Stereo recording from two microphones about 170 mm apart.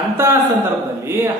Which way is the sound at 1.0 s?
15° right (ahead or behind).